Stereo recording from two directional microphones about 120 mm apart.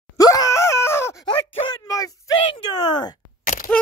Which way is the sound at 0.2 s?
30° left (ahead or behind).